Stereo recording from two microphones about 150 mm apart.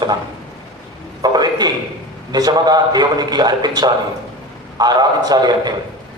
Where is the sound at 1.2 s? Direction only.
25° right (ahead or behind).